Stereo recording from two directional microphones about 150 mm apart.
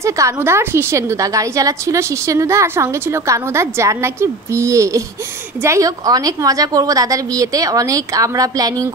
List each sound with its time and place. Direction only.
0.0 s a woman's voice: 20° right (ahead or behind)